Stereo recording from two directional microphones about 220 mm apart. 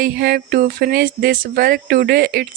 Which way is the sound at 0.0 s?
45° right (ahead or behind).